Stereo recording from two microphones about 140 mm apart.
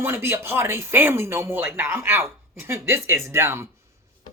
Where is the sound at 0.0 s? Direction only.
15° right (ahead or behind).